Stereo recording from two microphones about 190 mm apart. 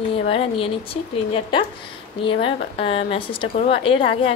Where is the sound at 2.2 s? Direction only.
30° left (ahead or behind).